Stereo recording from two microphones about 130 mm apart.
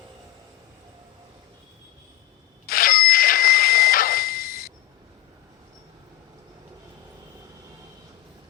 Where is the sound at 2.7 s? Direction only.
90° left.